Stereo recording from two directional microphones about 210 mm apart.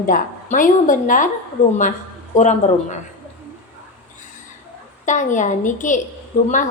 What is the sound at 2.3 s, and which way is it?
Speech, 35° left (ahead or behind).